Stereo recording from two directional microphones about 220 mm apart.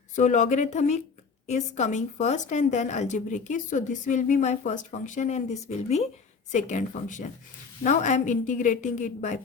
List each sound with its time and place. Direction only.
0.2 s speech: 35° left (ahead or behind)